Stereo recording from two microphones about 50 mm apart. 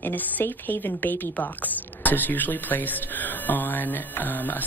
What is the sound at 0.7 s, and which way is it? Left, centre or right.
Speech, left.